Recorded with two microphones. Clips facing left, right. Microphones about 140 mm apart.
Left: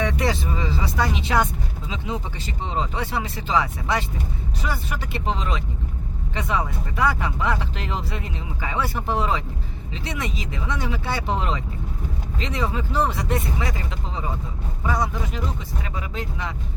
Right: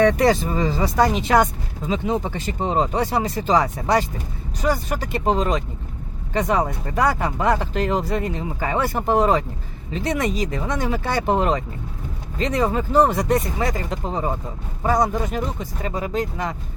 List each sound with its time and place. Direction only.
0.2 s speech: 45° right (ahead or behind)